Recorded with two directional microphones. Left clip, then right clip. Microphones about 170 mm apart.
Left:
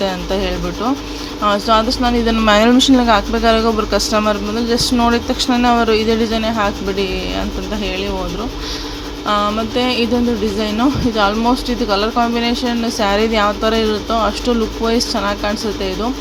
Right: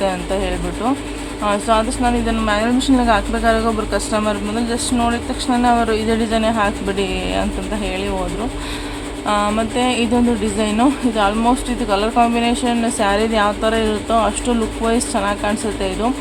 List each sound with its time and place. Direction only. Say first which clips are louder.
1.5 s speech: left 3 dB; 15° left (ahead or behind)
2.5 s speech: left 7 dB; 25° left (ahead or behind); by 7.4 s 10° left (ahead or behind)
9.2 s speech: left 1 dB; 10° left (ahead or behind)